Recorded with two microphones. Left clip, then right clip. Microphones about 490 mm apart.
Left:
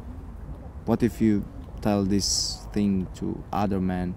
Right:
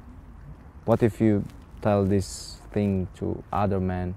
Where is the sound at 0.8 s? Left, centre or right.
Right.